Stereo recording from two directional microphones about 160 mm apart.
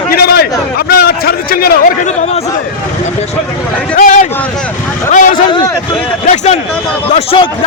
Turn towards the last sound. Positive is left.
turn(degrees=35)  # may be behind; listen again after turning